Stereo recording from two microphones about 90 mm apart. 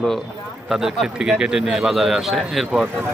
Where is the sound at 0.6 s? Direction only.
5° right (ahead or behind).